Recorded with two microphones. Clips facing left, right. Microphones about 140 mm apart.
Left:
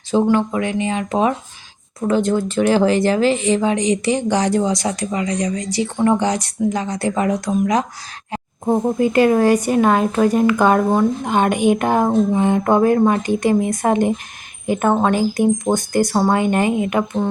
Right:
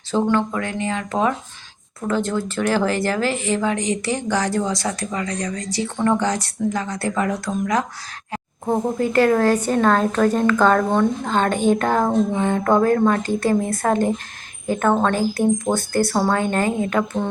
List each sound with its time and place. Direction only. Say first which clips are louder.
0.1 s speech: left 3 dB; 15° left (ahead or behind)